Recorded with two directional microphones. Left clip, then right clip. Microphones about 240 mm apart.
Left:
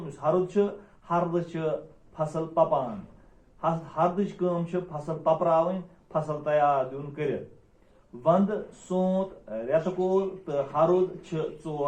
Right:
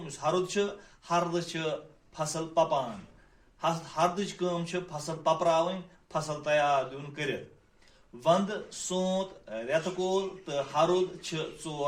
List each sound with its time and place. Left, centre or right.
0.2 s speech: right